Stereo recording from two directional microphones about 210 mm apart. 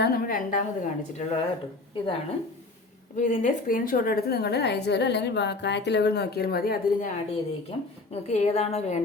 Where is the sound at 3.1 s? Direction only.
35° left (ahead or behind).